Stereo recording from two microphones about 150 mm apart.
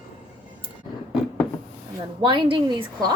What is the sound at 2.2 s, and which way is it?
Speech, 35° right (ahead or behind).